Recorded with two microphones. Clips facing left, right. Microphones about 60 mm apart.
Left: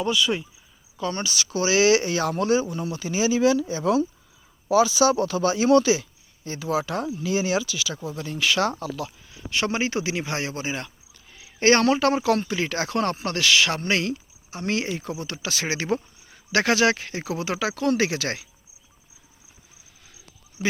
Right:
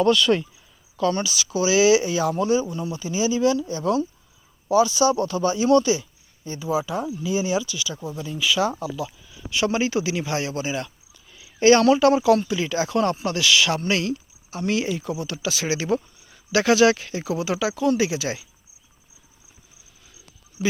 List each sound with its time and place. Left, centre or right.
0.0 s speech: centre
1.1 s speech: left
8.1 s speech: left
20.6 s speech: left